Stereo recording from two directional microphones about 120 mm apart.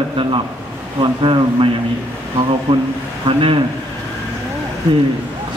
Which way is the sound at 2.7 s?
30° right (ahead or behind).